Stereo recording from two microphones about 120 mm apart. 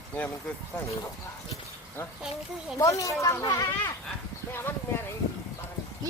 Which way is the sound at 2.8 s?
25° left (ahead or behind).